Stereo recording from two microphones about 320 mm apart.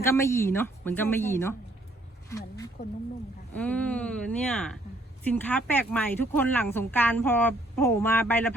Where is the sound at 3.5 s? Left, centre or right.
Centre.